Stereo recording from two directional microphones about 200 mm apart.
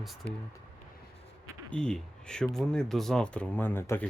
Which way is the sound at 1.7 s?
5° left (ahead or behind).